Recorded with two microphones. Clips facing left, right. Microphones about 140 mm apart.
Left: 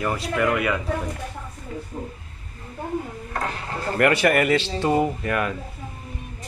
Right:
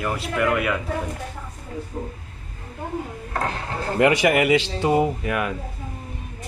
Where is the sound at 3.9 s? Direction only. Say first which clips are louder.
Right 1 dB; 15° right (ahead or behind).